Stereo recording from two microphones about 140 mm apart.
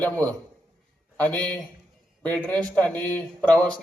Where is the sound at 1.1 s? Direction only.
10° left (ahead or behind).